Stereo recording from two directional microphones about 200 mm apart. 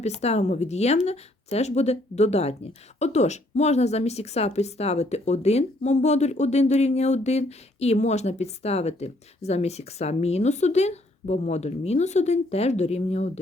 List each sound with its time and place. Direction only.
0.0 s a woman's voice: 35° left (ahead or behind)